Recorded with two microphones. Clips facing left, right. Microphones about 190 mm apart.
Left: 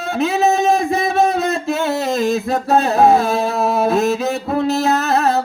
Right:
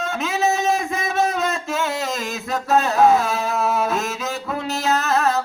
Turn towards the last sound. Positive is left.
turn(degrees=35)  # may be behind; listen again after turning